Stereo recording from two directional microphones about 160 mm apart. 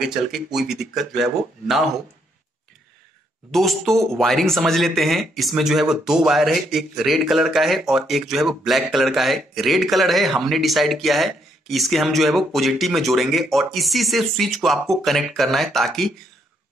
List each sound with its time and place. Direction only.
0.0 s speech: centre (ahead or behind)
3.5 s speech: centre (ahead or behind)